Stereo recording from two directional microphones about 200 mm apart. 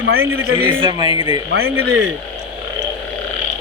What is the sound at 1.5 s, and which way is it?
Speech, 90° right.